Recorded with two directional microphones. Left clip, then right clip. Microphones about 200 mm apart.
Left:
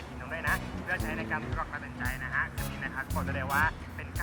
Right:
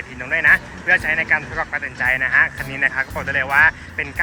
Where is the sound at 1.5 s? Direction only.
10° right (ahead or behind).